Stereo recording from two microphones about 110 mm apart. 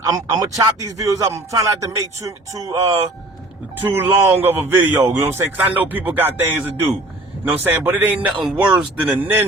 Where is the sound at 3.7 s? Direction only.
15° right (ahead or behind).